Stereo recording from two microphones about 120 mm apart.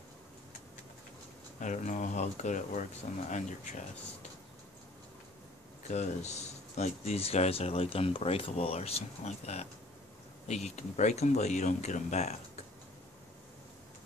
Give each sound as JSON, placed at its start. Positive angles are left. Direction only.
{"t": 1.6, "sound": "speech", "side_deg": 90}
{"t": 5.9, "sound": "speech", "side_deg": 70}